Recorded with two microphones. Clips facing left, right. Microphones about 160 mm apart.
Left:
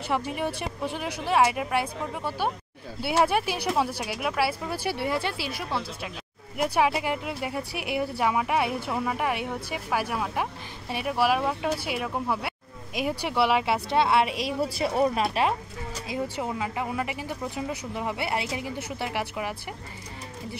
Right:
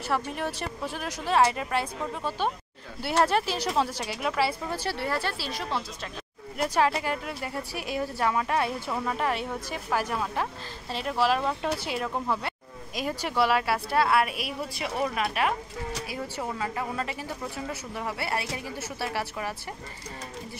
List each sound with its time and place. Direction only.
0.1 s speech: 15° left (ahead or behind); by 15.5 s 30° left (ahead or behind)
16.1 s speech: 15° left (ahead or behind)